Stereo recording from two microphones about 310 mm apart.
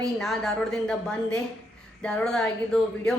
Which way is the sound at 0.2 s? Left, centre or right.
Centre.